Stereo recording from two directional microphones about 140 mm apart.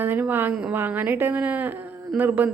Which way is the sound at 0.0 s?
15° right (ahead or behind).